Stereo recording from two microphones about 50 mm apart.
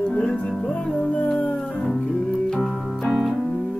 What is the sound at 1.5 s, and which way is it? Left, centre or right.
Music, centre.